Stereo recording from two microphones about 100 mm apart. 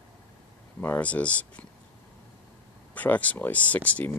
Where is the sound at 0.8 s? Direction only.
15° left (ahead or behind).